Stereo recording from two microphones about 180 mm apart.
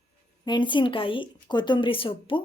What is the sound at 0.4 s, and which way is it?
A woman's voice, 25° left (ahead or behind).